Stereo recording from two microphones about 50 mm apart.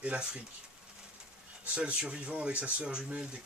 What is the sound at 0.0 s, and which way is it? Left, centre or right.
Speech, right.